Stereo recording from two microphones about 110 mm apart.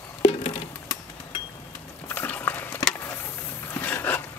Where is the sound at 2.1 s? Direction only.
15° left (ahead or behind).